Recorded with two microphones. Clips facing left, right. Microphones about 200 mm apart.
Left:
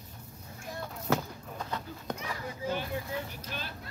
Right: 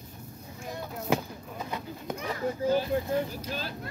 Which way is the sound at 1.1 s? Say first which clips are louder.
Right 2 dB; 10° right (ahead or behind).